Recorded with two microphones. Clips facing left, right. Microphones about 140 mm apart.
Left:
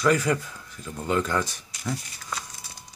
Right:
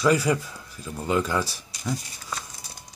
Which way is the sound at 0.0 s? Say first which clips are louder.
Right 1 dB; 10° right (ahead or behind).